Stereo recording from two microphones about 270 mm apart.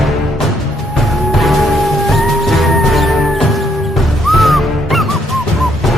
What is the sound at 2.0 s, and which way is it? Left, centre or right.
Music, centre.